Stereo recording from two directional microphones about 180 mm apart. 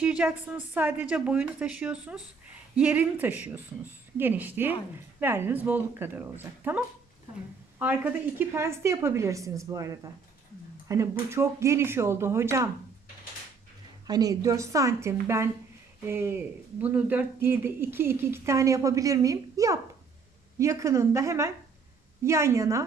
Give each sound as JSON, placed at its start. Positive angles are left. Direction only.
{"t": 0.0, "sound": "a woman's voice", "side_deg": -5}
{"t": 14.1, "sound": "a woman's voice", "side_deg": -20}